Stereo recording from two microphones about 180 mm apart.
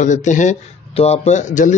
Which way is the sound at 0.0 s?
45° left (ahead or behind).